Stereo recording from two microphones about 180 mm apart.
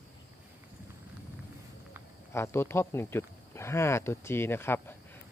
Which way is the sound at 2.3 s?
15° left (ahead or behind).